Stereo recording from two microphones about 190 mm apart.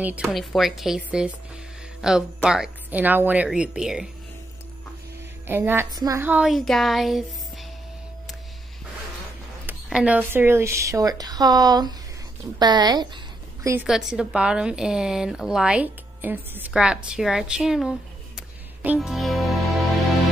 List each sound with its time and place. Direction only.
0.0 s a woman's voice: 5° right (ahead or behind)
5.5 s a woman's voice: 10° right (ahead or behind)
9.7 s a woman's voice: 5° right (ahead or behind); by 13.2 s 20° right (ahead or behind)
13.8 s a woman's voice: centre (ahead or behind)